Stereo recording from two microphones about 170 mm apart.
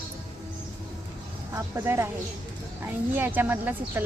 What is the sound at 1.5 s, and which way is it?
Speech, 15° right (ahead or behind).